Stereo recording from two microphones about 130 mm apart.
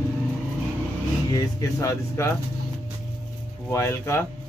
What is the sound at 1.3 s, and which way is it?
Speech, 25° left (ahead or behind).